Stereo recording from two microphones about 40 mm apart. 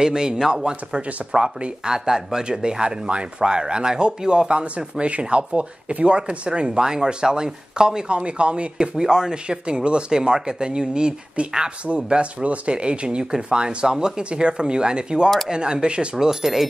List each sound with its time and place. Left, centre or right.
0.0 s speech: centre
16.3 s speech: centre